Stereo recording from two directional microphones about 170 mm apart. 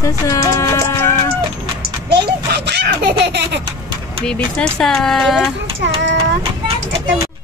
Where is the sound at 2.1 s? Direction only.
75° right (ahead or behind).